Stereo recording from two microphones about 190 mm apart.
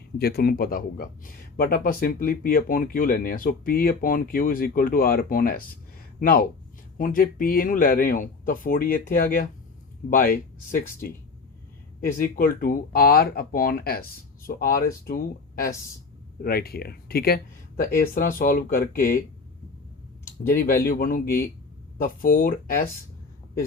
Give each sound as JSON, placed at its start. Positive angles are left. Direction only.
{"t": 0.2, "sound": "speech", "side_deg": 55}
{"t": 11.9, "sound": "speech", "side_deg": 45}
{"t": 20.5, "sound": "speech", "side_deg": 45}